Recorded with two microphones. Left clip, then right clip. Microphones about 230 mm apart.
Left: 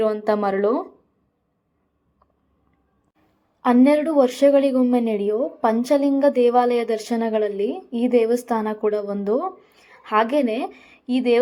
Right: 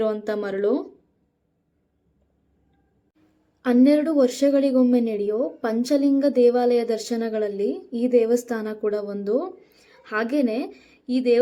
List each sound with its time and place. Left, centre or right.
0.3 s a woman's voice: centre
3.8 s a woman's voice: centre
7.7 s a woman's voice: left
8.0 s a woman's voice: centre